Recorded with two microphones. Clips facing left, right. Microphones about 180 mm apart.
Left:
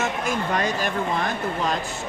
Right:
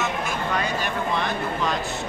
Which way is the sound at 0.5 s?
40° left (ahead or behind).